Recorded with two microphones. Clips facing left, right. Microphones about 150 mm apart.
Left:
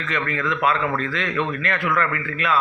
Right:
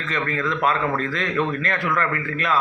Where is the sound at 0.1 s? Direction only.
35° right (ahead or behind).